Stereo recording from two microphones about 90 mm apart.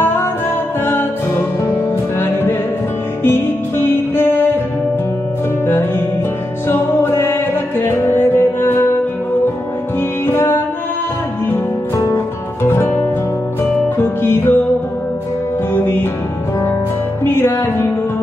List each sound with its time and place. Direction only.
0.8 s music: 25° left (ahead or behind)
6.7 s music: 25° left (ahead or behind)
10.2 s music: 30° left (ahead or behind)
12.6 s music: 25° left (ahead or behind)
15.7 s music: 25° left (ahead or behind)
17.2 s music: 25° left (ahead or behind)